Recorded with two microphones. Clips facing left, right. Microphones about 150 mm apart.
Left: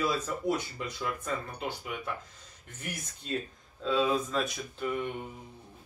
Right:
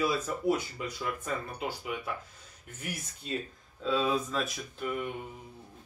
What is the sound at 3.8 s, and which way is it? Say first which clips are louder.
Speech: left 1 dB; centre (ahead or behind).